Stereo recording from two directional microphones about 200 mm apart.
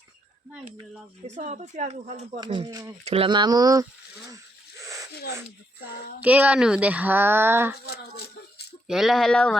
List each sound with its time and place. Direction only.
1.3 s speech: 35° right (ahead or behind)
2.4 s speech: 20° right (ahead or behind)
3.0 s speech: 30° right (ahead or behind)
6.2 s speech: 5° right (ahead or behind)
7.9 s a sound: 50° left (ahead or behind)
8.9 s speech: centre (ahead or behind)